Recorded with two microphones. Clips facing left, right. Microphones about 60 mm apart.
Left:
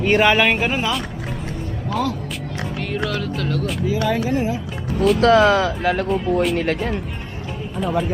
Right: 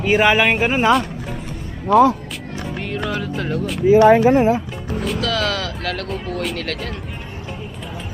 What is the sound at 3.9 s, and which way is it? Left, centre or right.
Speech, right.